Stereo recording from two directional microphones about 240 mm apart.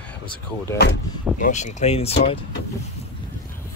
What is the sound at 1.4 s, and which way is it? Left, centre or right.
Speech, left.